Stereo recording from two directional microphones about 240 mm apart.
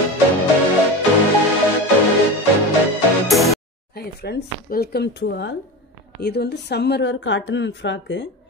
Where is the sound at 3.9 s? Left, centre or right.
Left.